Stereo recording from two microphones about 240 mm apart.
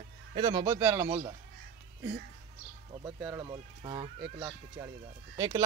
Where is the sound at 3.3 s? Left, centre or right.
Centre.